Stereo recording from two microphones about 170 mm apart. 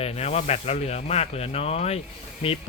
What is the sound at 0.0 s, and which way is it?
Speech, 35° left (ahead or behind).